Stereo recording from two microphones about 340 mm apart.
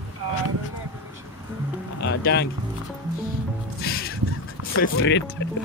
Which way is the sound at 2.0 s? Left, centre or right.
Left.